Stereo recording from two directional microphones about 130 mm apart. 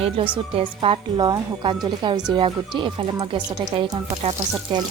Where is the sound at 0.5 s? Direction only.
45° right (ahead or behind).